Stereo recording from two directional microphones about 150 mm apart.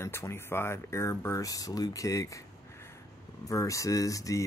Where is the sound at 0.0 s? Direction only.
15° left (ahead or behind).